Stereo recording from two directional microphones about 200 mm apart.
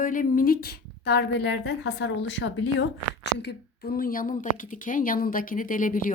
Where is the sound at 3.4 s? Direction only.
50° left (ahead or behind).